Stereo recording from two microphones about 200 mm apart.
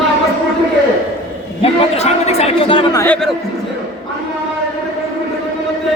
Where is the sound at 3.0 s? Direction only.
10° left (ahead or behind).